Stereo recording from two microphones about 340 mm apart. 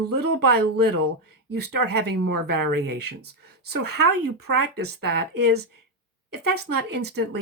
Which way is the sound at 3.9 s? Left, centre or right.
Right.